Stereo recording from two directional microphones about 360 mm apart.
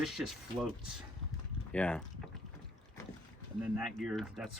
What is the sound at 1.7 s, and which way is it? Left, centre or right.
Speech, centre.